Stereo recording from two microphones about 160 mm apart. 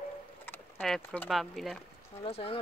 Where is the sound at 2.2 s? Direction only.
35° left (ahead or behind).